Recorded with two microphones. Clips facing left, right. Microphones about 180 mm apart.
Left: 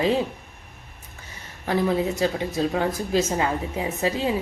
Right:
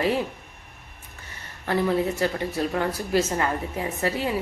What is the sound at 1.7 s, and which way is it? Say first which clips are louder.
A woman's voice: left 1 dB; 15° left (ahead or behind).